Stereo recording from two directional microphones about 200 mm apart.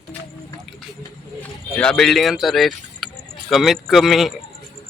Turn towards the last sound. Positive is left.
turn(degrees=0)  # may be behind; listen again after turning